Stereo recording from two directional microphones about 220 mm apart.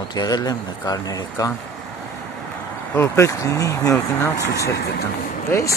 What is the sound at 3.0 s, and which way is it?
Speech, 15° left (ahead or behind).